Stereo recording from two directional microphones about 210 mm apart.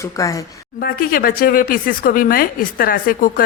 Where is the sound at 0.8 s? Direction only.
45° left (ahead or behind).